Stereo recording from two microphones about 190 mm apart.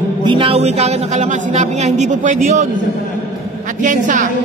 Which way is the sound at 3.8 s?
40° right (ahead or behind).